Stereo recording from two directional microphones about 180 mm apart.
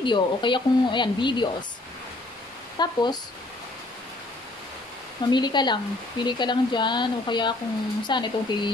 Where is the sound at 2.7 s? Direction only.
25° left (ahead or behind).